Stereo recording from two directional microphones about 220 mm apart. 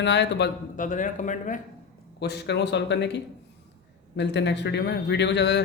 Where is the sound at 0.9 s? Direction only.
35° left (ahead or behind).